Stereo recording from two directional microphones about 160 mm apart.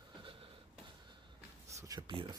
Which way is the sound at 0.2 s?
35° right (ahead or behind).